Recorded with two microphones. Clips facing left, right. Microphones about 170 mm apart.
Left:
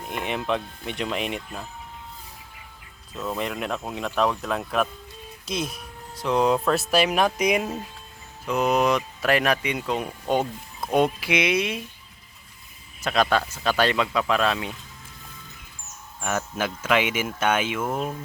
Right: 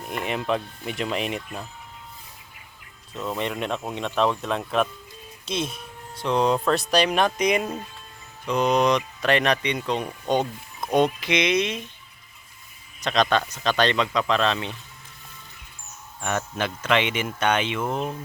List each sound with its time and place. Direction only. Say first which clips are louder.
0.1 s speech: right 1 dB; centre (ahead or behind)
3.2 s speech: right 1 dB; centre (ahead or behind)
13.0 s speech: even; 5° left (ahead or behind)
16.2 s speech: even; 5° left (ahead or behind)